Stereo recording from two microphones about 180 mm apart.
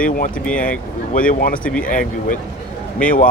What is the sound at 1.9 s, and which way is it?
Speech, 45° left (ahead or behind).